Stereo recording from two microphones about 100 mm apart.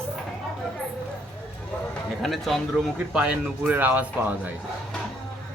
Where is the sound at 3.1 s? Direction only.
10° right (ahead or behind).